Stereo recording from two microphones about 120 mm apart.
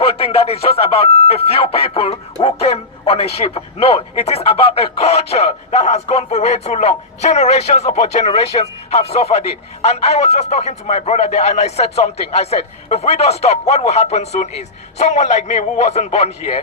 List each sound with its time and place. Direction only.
0.0 s speech: 55° left (ahead or behind)